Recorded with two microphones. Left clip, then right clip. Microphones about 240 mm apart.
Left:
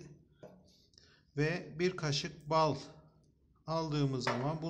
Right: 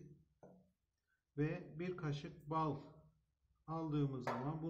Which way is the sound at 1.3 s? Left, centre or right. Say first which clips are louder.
Left 8 dB; left.